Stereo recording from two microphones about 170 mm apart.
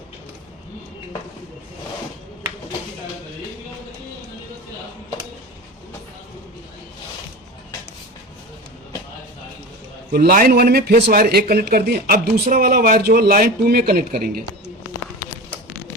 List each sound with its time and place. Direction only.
10.1 s speech: 60° right (ahead or behind)